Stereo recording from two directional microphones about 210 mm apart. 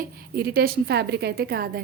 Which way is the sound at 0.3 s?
45° right (ahead or behind).